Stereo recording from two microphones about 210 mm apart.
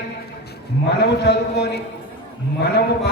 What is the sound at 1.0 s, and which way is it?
A man's voice, 55° left (ahead or behind).